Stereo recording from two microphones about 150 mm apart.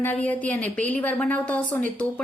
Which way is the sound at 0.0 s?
10° left (ahead or behind).